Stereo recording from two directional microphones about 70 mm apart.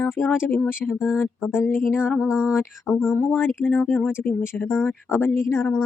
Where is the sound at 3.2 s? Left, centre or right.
Left.